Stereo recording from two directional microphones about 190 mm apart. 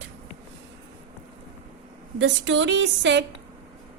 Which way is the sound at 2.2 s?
75° right (ahead or behind).